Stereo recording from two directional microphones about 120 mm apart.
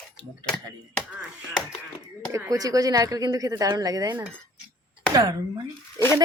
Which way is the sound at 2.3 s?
25° right (ahead or behind).